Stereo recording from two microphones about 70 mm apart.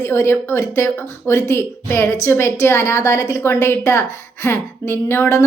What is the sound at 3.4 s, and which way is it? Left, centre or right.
A woman's voice, left.